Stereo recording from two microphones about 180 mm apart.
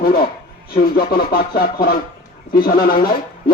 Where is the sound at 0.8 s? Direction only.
55° left (ahead or behind).